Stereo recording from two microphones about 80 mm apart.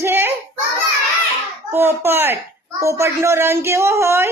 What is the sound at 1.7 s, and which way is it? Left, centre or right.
Speech, right.